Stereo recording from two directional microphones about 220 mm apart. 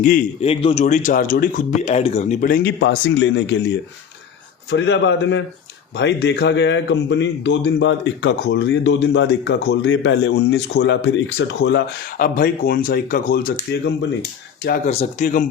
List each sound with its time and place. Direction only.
0.0 s a man's voice: 35° left (ahead or behind)
2.6 s a man's voice: 50° left (ahead or behind)
12.1 s a man's voice: 40° left (ahead or behind)